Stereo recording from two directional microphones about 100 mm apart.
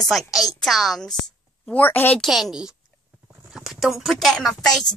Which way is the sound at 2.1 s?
Centre (ahead or behind).